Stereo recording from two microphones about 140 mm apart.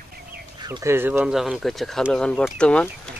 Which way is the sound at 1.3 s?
Centre (ahead or behind).